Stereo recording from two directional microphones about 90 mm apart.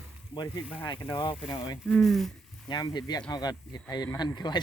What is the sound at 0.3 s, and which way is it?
Speech, 45° left (ahead or behind).